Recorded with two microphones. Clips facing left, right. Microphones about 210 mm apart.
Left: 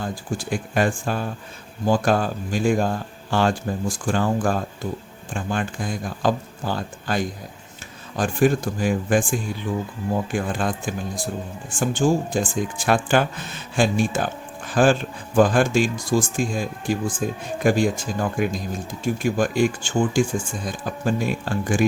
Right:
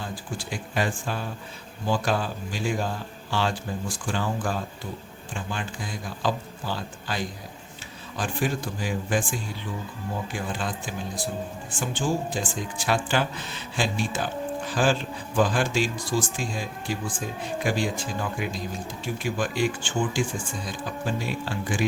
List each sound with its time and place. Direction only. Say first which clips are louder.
0.0 s speech: left 6 dB; 50° left (ahead or behind)